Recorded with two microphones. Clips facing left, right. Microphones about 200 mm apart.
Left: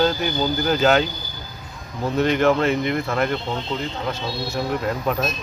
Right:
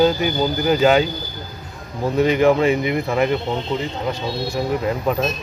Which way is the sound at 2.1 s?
10° right (ahead or behind).